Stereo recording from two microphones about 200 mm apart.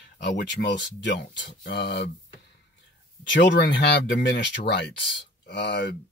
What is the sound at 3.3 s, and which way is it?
Speech, 60° left (ahead or behind).